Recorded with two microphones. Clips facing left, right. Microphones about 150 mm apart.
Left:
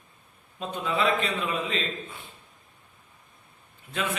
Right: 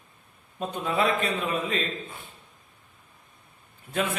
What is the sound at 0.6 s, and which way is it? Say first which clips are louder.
A man's voice: right 1 dB; 45° right (ahead or behind).